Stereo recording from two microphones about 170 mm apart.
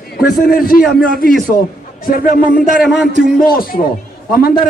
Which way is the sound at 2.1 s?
55° left (ahead or behind).